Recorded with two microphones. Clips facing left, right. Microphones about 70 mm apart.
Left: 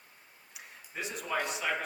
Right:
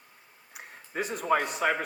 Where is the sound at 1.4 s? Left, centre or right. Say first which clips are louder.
Right 6 dB; right.